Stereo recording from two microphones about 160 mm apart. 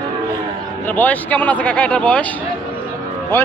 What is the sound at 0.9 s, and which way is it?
Speech, 10° left (ahead or behind).